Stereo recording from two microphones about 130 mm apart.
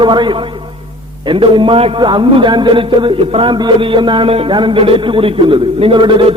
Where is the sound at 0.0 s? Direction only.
35° right (ahead or behind).